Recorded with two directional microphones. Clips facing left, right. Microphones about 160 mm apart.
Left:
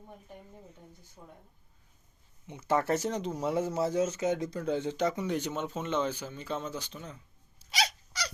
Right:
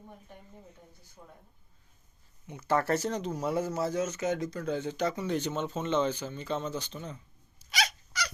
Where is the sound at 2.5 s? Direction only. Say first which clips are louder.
Even; 20° left (ahead or behind); by 7.2 s 5° left (ahead or behind).